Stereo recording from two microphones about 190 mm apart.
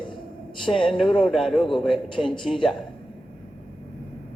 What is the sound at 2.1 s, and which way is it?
Speech, 25° left (ahead or behind).